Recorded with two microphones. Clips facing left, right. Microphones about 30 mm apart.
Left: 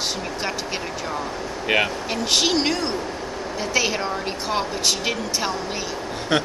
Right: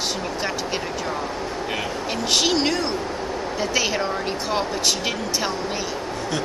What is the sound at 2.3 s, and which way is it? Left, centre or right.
A woman's voice, centre.